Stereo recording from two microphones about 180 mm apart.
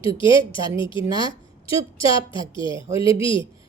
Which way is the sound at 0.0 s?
30° left (ahead or behind).